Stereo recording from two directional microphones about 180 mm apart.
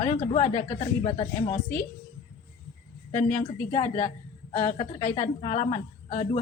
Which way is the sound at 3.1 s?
35° left (ahead or behind).